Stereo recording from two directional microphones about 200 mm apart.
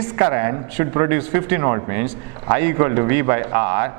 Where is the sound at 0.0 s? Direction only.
15° right (ahead or behind).